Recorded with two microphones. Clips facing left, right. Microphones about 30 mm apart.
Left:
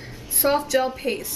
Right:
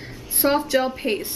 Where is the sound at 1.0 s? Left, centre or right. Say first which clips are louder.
Right 2 dB; right.